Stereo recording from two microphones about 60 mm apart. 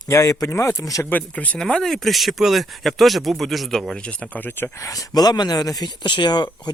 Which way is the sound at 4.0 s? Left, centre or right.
Centre.